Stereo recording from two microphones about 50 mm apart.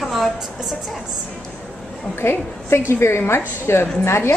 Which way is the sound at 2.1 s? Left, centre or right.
Left.